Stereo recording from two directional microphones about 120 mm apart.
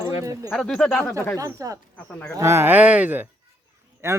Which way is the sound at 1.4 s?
25° right (ahead or behind).